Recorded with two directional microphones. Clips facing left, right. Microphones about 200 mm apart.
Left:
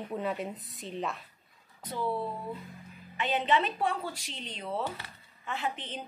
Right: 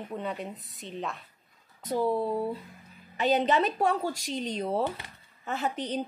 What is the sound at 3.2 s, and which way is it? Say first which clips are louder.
Speech: right 4 dB; 40° right (ahead or behind).